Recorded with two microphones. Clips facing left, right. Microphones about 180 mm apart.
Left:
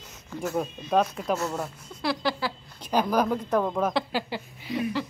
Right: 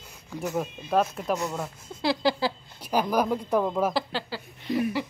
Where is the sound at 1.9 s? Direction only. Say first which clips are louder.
Right 3 dB; 25° right (ahead or behind).